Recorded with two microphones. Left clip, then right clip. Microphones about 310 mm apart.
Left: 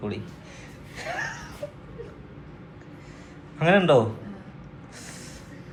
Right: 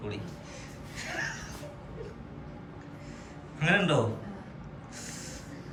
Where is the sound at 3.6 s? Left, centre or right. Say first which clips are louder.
Left 8 dB; centre.